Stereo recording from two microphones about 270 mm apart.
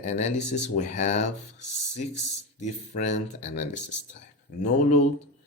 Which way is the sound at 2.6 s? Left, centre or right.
Left.